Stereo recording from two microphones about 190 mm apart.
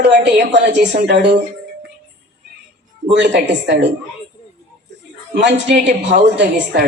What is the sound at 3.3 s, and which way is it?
Speech, 65° right (ahead or behind).